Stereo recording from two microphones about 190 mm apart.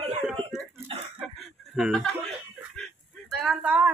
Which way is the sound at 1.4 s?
Centre (ahead or behind).